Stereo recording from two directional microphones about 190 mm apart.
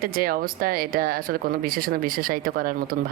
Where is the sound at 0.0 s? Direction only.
50° right (ahead or behind).